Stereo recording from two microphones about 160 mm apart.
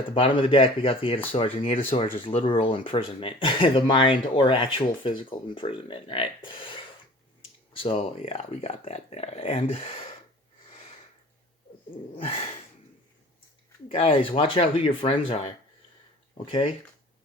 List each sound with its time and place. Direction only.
0.1 s speech: 35° left (ahead or behind)
12.1 s speech: 35° left (ahead or behind)
13.8 s speech: 35° left (ahead or behind)